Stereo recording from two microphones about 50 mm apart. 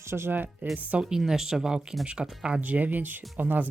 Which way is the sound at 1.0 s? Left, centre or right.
Centre.